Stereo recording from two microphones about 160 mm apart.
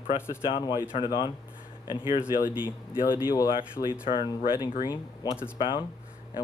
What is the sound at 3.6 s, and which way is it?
Speech, 15° right (ahead or behind).